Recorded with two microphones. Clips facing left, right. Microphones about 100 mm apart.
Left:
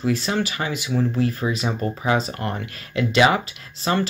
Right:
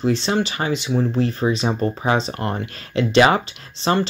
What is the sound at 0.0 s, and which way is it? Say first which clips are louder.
Speech: right 3 dB; 30° right (ahead or behind).